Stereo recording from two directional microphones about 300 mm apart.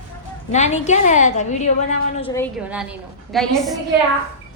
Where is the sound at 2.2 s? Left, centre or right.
Centre.